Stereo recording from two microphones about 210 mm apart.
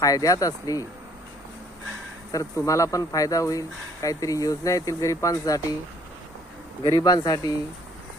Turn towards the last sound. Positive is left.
turn(degrees=15)  # may be behind; listen again after turning